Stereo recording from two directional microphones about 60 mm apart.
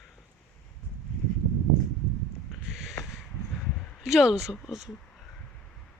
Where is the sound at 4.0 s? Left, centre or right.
Centre.